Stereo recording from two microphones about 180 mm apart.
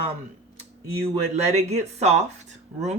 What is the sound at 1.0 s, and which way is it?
Speech, 35° right (ahead or behind).